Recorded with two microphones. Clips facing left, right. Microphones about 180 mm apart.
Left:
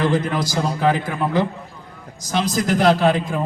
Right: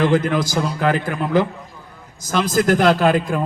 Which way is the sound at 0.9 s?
55° right (ahead or behind).